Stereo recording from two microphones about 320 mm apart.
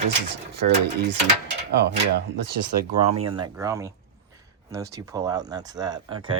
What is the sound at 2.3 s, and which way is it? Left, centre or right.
Speech, right.